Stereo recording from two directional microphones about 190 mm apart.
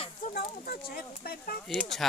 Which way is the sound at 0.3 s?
50° left (ahead or behind).